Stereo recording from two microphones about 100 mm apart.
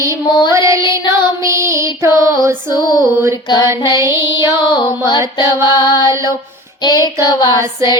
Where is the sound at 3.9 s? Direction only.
30° right (ahead or behind).